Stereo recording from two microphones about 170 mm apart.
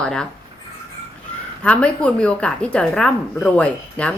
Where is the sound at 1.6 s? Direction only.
5° left (ahead or behind).